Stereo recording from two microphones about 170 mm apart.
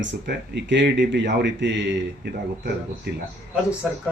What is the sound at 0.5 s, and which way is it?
Speech, 90° right.